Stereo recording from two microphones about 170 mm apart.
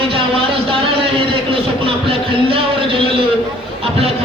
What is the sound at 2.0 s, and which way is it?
Music, 35° right (ahead or behind).